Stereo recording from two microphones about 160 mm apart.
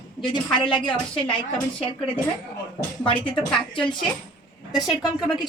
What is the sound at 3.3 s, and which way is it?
Speech, 5° left (ahead or behind).